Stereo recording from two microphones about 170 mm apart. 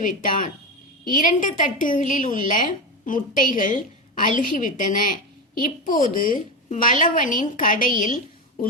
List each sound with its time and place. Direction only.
0.0 s a woman's voice: 50° left (ahead or behind)